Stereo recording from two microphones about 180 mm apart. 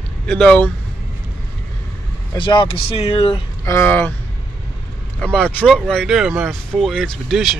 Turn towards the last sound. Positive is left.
turn(degrees=0)  # may be behind; listen again after turning